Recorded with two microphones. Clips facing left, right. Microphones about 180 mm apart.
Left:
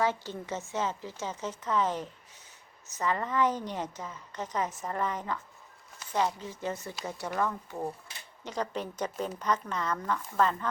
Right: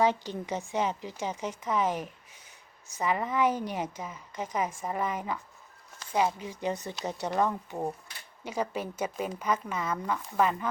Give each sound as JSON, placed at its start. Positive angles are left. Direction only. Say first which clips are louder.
{"t": 0.0, "sound": "a woman's voice", "louder": "right 3 dB", "side_deg": -15}